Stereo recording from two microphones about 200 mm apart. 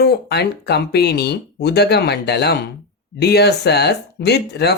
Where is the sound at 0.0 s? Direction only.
55° left (ahead or behind).